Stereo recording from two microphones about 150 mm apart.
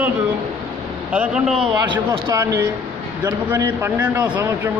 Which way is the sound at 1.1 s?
5° right (ahead or behind).